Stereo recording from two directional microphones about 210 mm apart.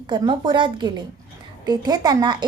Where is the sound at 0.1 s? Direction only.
20° right (ahead or behind).